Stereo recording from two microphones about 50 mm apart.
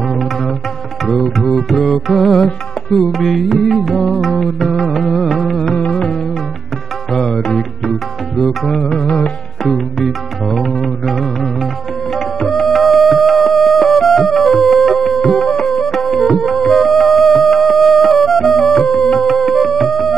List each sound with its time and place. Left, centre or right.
0.0 s music: centre
5.8 s music: left
7.1 s music: centre
8.9 s music: centre
9.6 s music: centre